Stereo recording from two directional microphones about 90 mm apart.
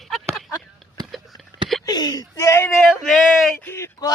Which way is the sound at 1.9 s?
50° left (ahead or behind).